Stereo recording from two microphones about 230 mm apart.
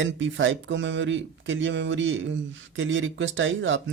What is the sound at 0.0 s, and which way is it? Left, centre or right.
Speech, right.